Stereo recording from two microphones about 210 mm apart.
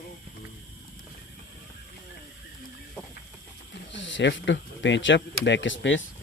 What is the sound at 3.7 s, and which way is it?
Speech, 60° left (ahead or behind).